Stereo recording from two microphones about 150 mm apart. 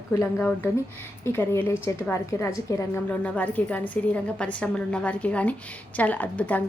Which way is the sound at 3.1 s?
10° left (ahead or behind).